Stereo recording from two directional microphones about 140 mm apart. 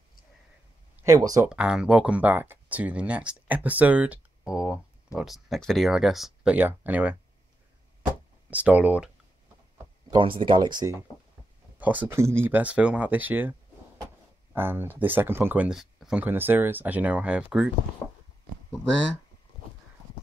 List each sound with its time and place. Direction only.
1.0 s speech: 25° right (ahead or behind)
1.5 s speech: 5° right (ahead or behind)
8.5 s speech: 10° right (ahead or behind)
10.1 s speech: 35° right (ahead or behind)
11.8 s speech: 10° right (ahead or behind)
16.3 s speech: 15° right (ahead or behind)
18.7 s speech: 5° left (ahead or behind)